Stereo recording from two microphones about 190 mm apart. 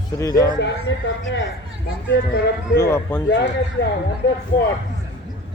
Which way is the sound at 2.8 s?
10° left (ahead or behind).